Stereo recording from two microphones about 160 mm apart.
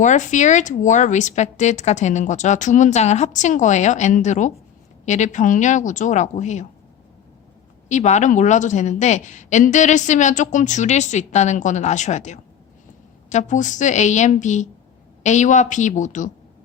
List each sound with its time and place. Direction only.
0.0 s speech: 50° left (ahead or behind)
7.9 s speech: 50° left (ahead or behind)